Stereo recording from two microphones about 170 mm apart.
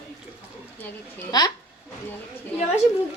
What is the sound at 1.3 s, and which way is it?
Speech, 25° left (ahead or behind).